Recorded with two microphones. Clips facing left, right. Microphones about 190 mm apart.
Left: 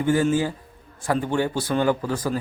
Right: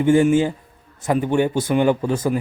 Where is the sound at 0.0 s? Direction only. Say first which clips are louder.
Right 5 dB; 20° right (ahead or behind).